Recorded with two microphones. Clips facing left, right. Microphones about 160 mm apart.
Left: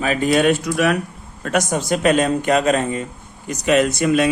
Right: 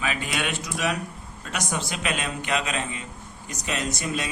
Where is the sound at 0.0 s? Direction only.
40° left (ahead or behind).